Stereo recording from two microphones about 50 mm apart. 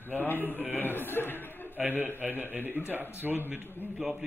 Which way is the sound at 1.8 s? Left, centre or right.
Right.